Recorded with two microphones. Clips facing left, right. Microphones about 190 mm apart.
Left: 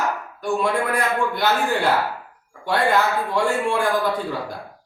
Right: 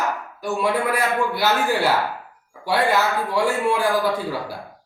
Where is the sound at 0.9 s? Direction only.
5° right (ahead or behind).